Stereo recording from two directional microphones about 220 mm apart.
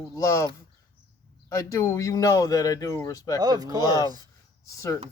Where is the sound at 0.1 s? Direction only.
15° left (ahead or behind).